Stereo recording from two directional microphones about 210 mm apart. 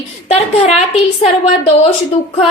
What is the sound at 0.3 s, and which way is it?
A woman's voice, 30° left (ahead or behind).